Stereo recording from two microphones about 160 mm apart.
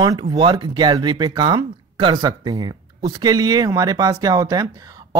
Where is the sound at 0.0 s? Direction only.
25° right (ahead or behind).